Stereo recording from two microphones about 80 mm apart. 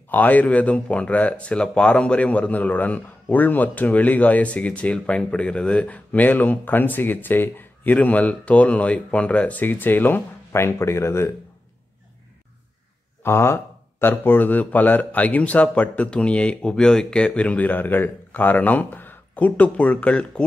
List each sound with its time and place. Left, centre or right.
0.1 s speech: left
13.2 s speech: left; by 20.4 s centre